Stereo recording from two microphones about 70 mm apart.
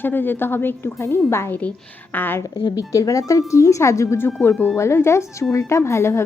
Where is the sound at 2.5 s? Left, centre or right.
Left.